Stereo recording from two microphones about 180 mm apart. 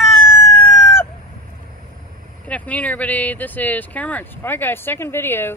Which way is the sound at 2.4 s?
10° left (ahead or behind).